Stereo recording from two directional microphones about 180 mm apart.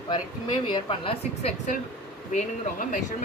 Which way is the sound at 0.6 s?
25° left (ahead or behind).